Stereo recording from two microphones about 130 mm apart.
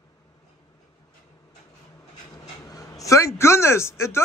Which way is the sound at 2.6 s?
25° left (ahead or behind).